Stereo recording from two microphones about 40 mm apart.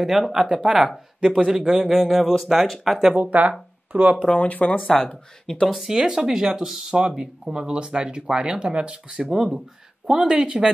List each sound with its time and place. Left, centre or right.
0.3 s speech: centre
0.6 s speech: right
0.8 s speech: centre
3.3 s speech: right
4.3 s speech: left
4.8 s speech: centre
5.7 s speech: centre; by 9.0 s right
9.2 s speech: centre
10.1 s speech: right